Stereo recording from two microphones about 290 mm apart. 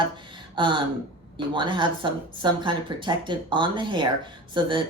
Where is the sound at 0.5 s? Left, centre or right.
Centre.